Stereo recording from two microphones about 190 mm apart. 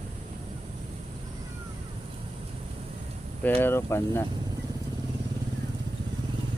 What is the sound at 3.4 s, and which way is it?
Speech, 10° left (ahead or behind).